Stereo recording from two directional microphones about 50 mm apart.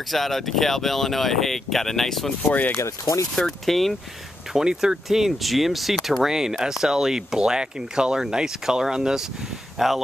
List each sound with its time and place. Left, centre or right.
0.1 s speech: centre
2.5 s speech: left
3.3 s speech: centre
4.6 s speech: centre